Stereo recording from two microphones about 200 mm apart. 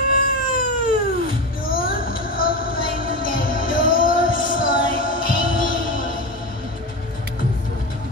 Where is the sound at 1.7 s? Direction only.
45° left (ahead or behind).